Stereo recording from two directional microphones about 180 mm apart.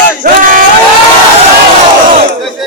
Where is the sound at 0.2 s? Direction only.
50° right (ahead or behind).